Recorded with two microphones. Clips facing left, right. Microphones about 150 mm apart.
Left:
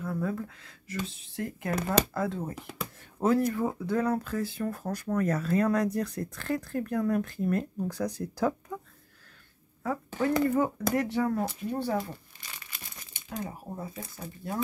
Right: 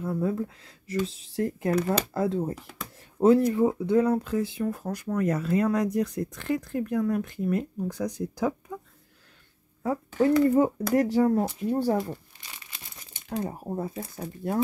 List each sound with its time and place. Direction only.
0.0 s speech: 25° right (ahead or behind)
9.8 s speech: 30° right (ahead or behind)
13.1 s speech: 40° right (ahead or behind)